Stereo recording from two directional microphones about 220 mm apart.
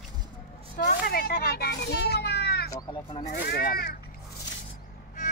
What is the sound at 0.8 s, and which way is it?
A child's voice, 45° left (ahead or behind).